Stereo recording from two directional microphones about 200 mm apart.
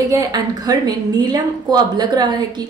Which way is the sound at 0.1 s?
20° right (ahead or behind).